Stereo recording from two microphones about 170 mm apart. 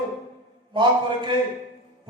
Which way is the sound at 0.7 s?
30° right (ahead or behind).